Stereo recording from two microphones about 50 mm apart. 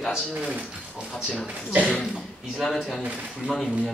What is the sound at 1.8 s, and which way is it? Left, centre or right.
Speech, centre.